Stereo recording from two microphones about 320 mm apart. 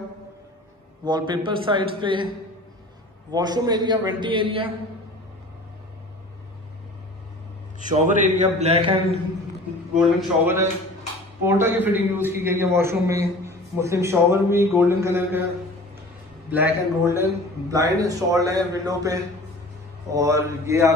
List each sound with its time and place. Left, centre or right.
1.0 s a man's voice: centre
3.3 s a man's voice: centre
7.8 s a man's voice: right
9.9 s a man's voice: centre
16.4 s a man's voice: centre